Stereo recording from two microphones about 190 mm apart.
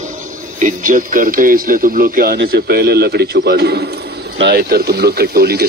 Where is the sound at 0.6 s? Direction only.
45° right (ahead or behind).